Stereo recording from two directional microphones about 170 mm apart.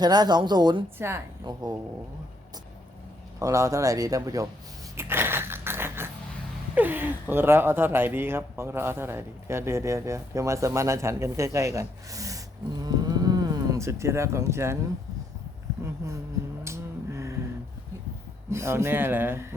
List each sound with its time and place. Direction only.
0.0 s speech: 25° right (ahead or behind)
0.9 s speech: 15° right (ahead or behind)
3.4 s speech: 20° right (ahead or behind)
4.9 s biting: 15° right (ahead or behind)
6.7 s speech: 10° right (ahead or behind)
12.8 s cattle: 25° right (ahead or behind)
15.8 s speech: 15° right (ahead or behind)
16.6 s music: 15° right (ahead or behind)
18.5 s speech: 15° right (ahead or behind)